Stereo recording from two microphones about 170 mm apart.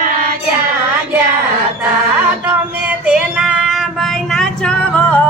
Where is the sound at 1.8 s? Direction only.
10° right (ahead or behind).